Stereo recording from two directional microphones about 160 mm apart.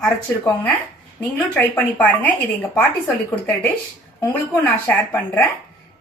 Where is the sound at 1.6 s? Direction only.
10° left (ahead or behind).